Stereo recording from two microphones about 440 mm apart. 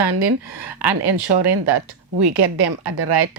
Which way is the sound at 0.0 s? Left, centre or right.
Right.